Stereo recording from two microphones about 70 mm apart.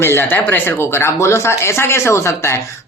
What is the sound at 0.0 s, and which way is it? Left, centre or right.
Speech, left.